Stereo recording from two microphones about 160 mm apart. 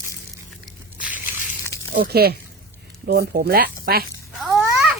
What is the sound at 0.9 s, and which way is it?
Squish, 10° right (ahead or behind).